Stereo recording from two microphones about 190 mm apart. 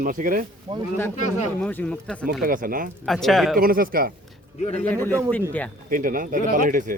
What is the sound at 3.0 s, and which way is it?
Speech, centre (ahead or behind).